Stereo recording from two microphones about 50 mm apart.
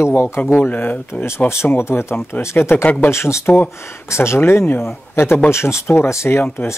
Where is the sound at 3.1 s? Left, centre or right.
Left.